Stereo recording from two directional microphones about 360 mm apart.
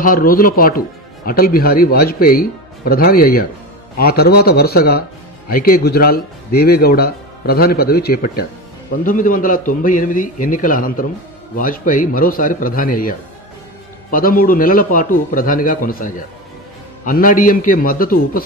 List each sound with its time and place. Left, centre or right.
0.0 s speech: left
14.1 s speech: left